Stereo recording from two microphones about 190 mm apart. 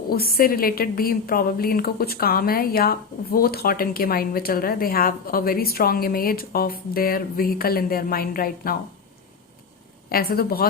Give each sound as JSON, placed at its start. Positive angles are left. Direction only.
{"t": 0.1, "sound": "a woman's voice", "side_deg": 50}
{"t": 10.1, "sound": "a woman's voice", "side_deg": 50}